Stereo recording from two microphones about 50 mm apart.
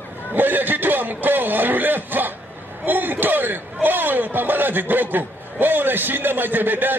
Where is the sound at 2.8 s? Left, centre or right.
Right.